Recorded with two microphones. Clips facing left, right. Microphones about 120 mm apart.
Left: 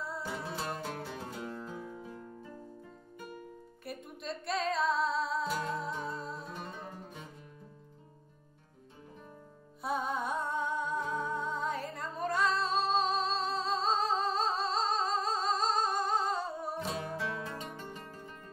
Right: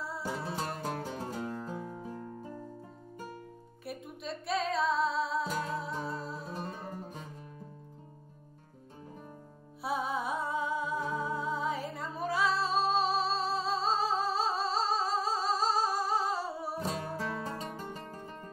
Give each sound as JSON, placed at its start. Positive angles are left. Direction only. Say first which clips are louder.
{"t": 0.2, "sound": "music", "louder": "right 2 dB", "side_deg": -40}
{"t": 3.8, "sound": "music", "louder": "right 1 dB", "side_deg": 0}
{"t": 9.8, "sound": "music", "louder": "right 1 dB", "side_deg": 0}
{"t": 16.8, "sound": "music", "louder": "right 2 dB", "side_deg": -40}